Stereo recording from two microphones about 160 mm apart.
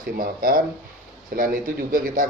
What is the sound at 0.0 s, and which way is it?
Speech, 65° right (ahead or behind).